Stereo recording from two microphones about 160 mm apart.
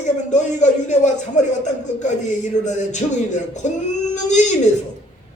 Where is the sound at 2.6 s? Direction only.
50° left (ahead or behind).